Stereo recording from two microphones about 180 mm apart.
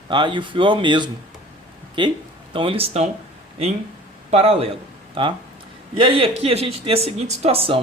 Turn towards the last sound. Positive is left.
turn(degrees=-30)  # may be behind; listen again after turning